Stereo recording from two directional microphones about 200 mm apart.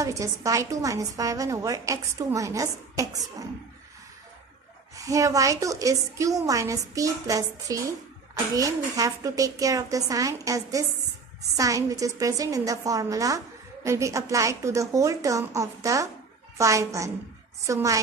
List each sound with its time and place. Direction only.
0.0 s a woman's voice: 15° right (ahead or behind)
4.9 s a woman's voice: 15° right (ahead or behind)